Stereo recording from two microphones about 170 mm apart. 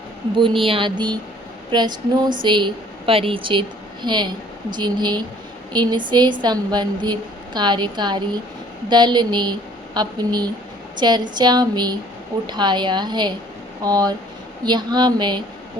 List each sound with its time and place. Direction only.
0.3 s a woman's voice: 30° right (ahead or behind)